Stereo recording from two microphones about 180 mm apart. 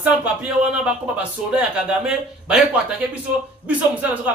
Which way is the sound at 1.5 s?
5° right (ahead or behind).